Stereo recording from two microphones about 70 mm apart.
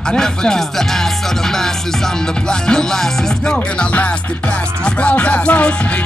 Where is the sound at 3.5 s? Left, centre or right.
Centre.